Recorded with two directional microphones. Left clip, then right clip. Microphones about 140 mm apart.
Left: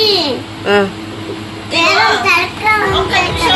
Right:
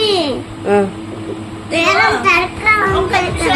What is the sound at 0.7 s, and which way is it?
Speech, 20° right (ahead or behind).